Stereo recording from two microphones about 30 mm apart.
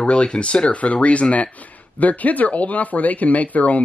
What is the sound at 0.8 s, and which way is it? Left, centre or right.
Speech, left.